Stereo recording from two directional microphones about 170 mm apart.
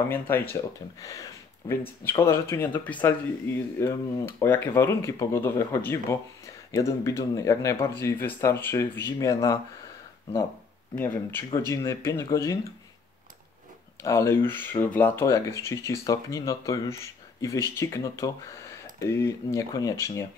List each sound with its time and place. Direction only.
0.1 s speech: 15° left (ahead or behind)
11.0 s speech: 15° left (ahead or behind)
14.0 s speech: 15° left (ahead or behind)